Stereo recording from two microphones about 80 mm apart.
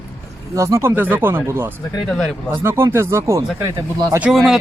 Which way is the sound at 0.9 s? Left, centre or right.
Right.